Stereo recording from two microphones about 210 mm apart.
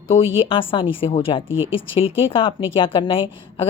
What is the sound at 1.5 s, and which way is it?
Speech, 65° left (ahead or behind).